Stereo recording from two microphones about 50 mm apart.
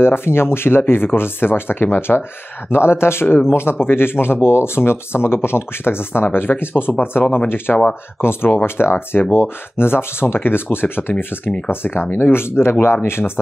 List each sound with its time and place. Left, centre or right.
0.0 s speech: left